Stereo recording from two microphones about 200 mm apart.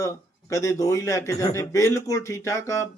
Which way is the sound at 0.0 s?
15° left (ahead or behind).